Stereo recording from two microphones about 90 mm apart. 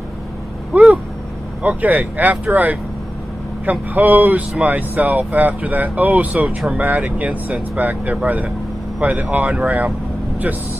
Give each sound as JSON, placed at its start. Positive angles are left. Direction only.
{"t": 0.7, "sound": "speech", "side_deg": -20}